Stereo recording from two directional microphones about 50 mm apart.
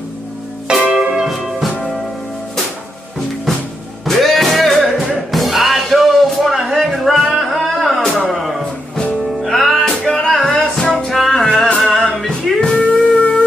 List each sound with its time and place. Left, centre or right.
0.9 s music: centre
4.0 s music: centre
10.0 s music: centre